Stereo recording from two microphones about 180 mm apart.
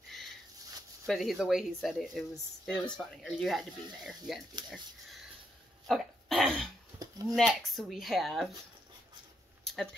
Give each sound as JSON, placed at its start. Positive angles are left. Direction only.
{"t": 1.0, "sound": "speech", "side_deg": 0}
{"t": 5.9, "sound": "cough", "side_deg": 0}
{"t": 7.0, "sound": "a sound", "side_deg": -20}
{"t": 7.3, "sound": "speech", "side_deg": 0}